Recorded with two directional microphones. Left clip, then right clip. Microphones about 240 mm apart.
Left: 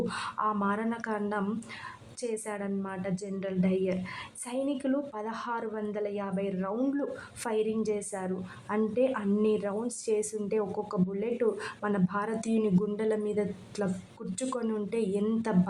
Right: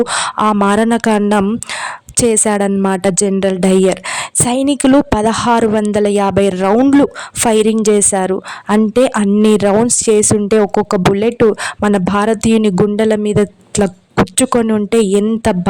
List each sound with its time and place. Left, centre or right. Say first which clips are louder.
0.0 s a woman's voice: right 17 dB; right